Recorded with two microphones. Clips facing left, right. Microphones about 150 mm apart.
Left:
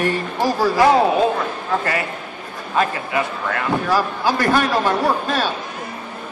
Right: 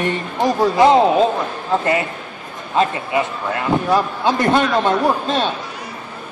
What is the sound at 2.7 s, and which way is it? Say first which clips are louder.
A man's voice: right 2 dB; 20° right (ahead or behind).